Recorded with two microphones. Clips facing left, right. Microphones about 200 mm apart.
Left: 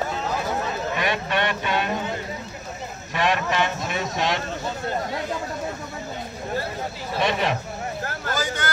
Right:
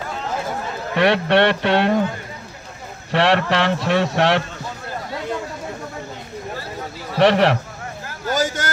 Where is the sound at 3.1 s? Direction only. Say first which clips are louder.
Right 5 dB; 70° right (ahead or behind).